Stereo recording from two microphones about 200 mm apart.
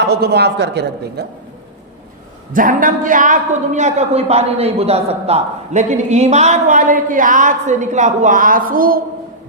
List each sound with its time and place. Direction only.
0.0 s speech: 55° right (ahead or behind)
2.5 s a woman's voice: 40° right (ahead or behind)